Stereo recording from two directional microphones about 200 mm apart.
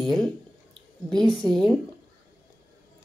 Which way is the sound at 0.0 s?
Centre (ahead or behind).